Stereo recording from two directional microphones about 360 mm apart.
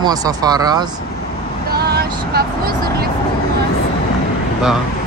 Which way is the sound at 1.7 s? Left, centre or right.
Right.